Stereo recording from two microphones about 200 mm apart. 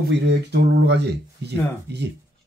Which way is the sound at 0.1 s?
60° right (ahead or behind).